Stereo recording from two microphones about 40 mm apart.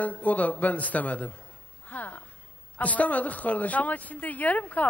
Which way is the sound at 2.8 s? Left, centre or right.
Left.